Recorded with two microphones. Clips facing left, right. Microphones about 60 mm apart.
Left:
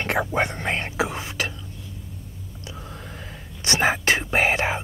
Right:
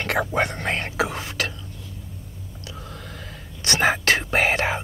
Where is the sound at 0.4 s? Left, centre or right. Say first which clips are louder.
Even; centre.